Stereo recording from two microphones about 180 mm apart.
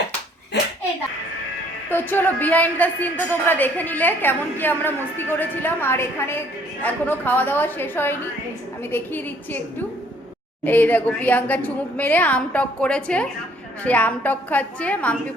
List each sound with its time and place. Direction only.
0.5 s a sound: 70° left (ahead or behind)
1.9 s a woman's voice: 10° left (ahead or behind)
10.6 s a woman's voice: 10° left (ahead or behind)